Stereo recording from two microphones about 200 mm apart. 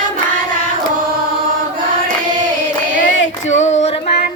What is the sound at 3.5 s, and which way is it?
Female singing, 35° left (ahead or behind).